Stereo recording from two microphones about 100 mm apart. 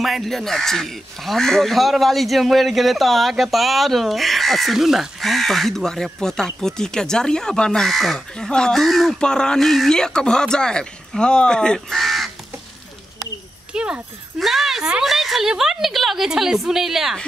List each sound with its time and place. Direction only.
0.0 s speech: centre (ahead or behind)
13.7 s speech: 10° right (ahead or behind)